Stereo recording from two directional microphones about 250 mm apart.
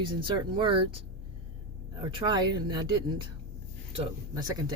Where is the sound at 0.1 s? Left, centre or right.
Centre.